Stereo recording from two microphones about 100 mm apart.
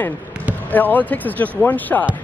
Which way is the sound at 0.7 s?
15° left (ahead or behind).